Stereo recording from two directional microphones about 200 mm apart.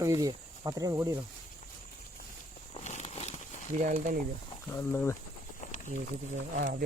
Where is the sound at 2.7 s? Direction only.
35° left (ahead or behind).